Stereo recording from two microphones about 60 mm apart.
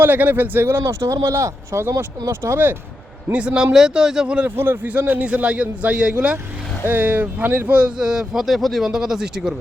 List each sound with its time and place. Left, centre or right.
0.0 s speech: right
2.3 s speech: right
3.3 s a man's voice: centre
4.4 s speech: right
4.9 s speech: right
6.8 s a man's voice: right; by 9.6 s centre